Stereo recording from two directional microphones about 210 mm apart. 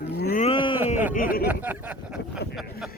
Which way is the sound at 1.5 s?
10° right (ahead or behind).